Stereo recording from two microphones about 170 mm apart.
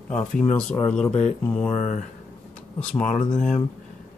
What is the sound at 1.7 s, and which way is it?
Speech, 45° left (ahead or behind).